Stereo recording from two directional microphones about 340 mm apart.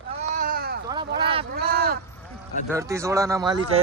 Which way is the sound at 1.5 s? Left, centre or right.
Right.